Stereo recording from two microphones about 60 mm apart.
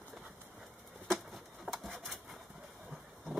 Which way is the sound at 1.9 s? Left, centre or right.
Right.